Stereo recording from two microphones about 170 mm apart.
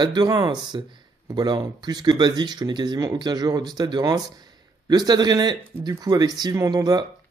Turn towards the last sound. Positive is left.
turn(degrees=-25)  # may be behind; listen again after turning